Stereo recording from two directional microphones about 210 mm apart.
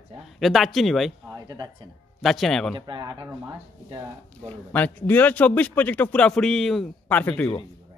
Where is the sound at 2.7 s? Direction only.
20° right (ahead or behind).